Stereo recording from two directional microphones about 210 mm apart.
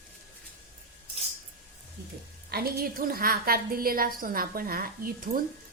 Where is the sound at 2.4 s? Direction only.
45° right (ahead or behind).